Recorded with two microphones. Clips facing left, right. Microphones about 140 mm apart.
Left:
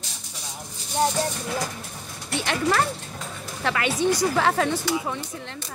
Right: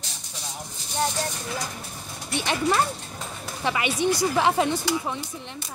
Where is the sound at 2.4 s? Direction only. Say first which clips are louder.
Even; 20° right (ahead or behind).